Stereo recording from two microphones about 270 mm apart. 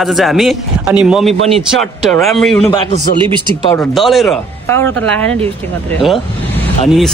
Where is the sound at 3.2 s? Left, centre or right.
Centre.